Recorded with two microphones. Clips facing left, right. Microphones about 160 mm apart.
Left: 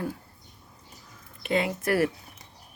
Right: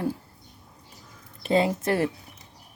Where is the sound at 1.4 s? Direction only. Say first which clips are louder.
Right 3 dB; 30° right (ahead or behind).